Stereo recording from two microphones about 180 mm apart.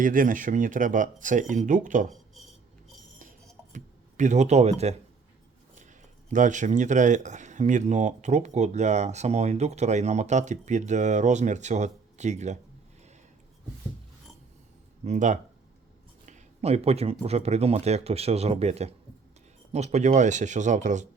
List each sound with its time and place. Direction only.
0.0 s speech: 50° right (ahead or behind)
3.7 s speech: 45° right (ahead or behind)
6.3 s speech: 45° right (ahead or behind)
15.0 s speech: 40° right (ahead or behind)